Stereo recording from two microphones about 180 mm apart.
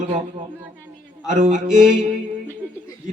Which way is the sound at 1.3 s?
45° right (ahead or behind).